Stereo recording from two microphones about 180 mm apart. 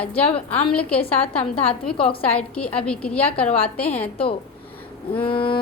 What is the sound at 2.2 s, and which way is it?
A woman's voice, 10° left (ahead or behind).